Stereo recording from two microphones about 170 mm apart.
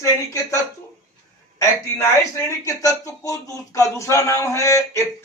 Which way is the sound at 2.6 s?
20° left (ahead or behind).